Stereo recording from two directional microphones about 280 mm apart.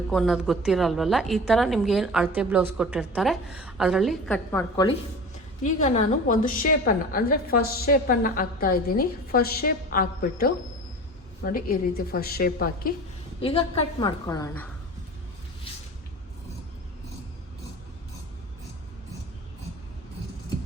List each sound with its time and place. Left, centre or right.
0.1 s a woman's voice: centre
5.6 s a woman's voice: left
13.4 s a woman's voice: centre